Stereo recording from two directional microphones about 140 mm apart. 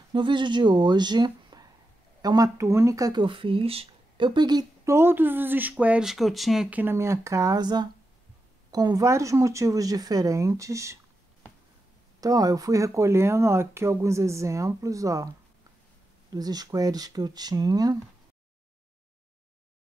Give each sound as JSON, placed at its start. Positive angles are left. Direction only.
{"t": 0.1, "sound": "speech", "side_deg": -35}
{"t": 12.2, "sound": "speech", "side_deg": -25}
{"t": 16.3, "sound": "speech", "side_deg": -25}